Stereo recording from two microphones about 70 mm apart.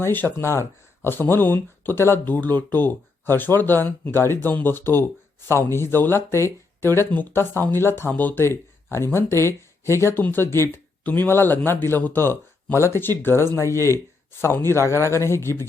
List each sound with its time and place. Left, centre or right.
0.0 s speech: left
0.3 s speech: left
8.4 s speech: left